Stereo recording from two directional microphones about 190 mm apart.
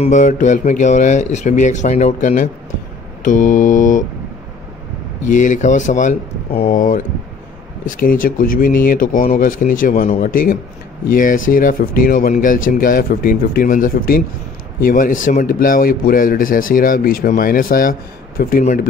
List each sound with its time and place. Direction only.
0.0 s a man's voice: 40° left (ahead or behind)
5.2 s a man's voice: 40° left (ahead or behind)